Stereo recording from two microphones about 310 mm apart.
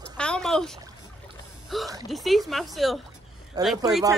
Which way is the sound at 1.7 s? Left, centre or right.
Centre.